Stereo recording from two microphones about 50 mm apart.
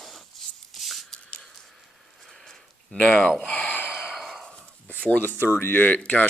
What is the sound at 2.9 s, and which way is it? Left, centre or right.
Speech, centre.